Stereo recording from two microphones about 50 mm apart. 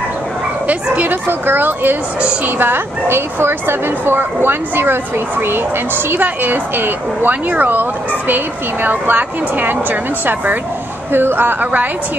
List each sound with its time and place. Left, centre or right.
0.7 s speech: right
6.0 s speech: right
8.8 s speech: right
11.1 s speech: right